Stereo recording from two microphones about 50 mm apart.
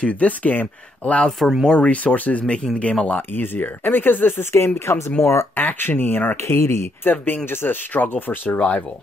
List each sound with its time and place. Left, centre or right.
0.0 s speech: left
2.4 s speech: centre
3.2 s speech: left
4.7 s speech: left
5.6 s speech: left
6.3 s speech: left
7.0 s speech: left
8.5 s speech: left